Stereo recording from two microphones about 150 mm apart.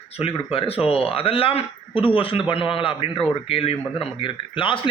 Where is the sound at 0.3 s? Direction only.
40° left (ahead or behind).